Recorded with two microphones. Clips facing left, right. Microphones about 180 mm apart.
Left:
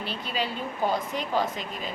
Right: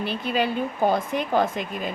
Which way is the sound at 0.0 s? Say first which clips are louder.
Right 6 dB; 55° right (ahead or behind).